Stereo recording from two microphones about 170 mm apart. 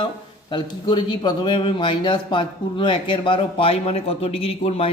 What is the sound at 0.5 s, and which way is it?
Speech, 25° left (ahead or behind).